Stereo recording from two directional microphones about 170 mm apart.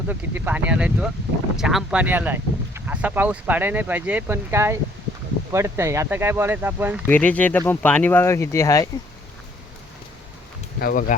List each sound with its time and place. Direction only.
0.1 s speech: 10° right (ahead or behind)
7.1 s speech: 10° left (ahead or behind)
10.8 s speech: 60° left (ahead or behind)